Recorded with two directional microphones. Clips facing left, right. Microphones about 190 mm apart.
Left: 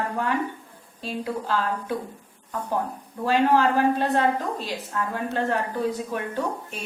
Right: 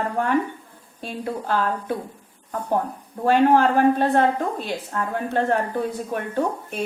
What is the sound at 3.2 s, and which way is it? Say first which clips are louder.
A woman's voice: right 3 dB; 55° right (ahead or behind).